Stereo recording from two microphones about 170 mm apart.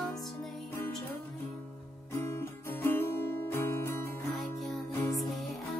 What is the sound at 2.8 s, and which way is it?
Music, 15° left (ahead or behind).